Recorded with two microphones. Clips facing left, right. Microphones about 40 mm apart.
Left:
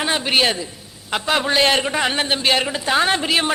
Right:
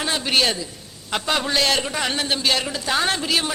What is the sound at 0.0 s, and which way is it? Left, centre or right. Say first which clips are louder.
A man's voice: left 3 dB; left.